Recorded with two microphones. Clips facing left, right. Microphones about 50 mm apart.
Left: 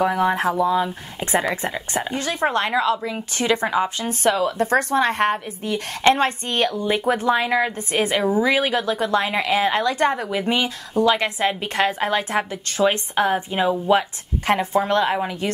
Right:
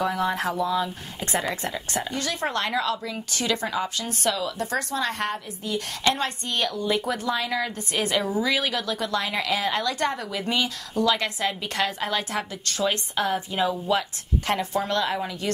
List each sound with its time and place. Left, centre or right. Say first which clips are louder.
0.0 s speech: left 6 dB; left